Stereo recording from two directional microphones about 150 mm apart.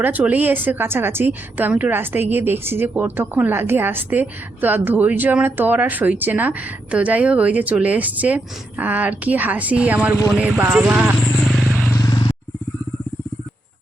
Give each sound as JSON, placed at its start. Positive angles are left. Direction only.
{"t": 0.0, "sound": "a woman's voice", "side_deg": -10}
{"t": 11.9, "sound": "vehicle", "side_deg": 25}